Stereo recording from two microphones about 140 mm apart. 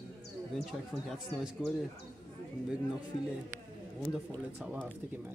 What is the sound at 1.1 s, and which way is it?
Speech, centre (ahead or behind).